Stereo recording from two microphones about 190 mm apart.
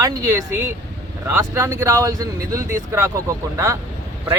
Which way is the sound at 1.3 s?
15° right (ahead or behind).